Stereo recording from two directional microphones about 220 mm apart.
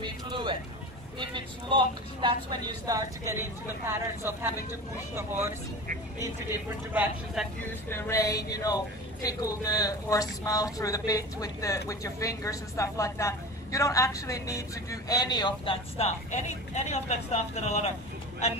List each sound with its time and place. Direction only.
0.0 s speech: 20° right (ahead or behind)
2.2 s speech: 20° right (ahead or behind)
6.9 s speech: 5° right (ahead or behind)
7.9 s a woman's voice: 15° left (ahead or behind); by 17.9 s 30° left (ahead or behind)